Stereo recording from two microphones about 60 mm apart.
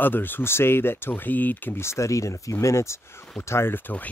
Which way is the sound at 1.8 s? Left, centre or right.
Left.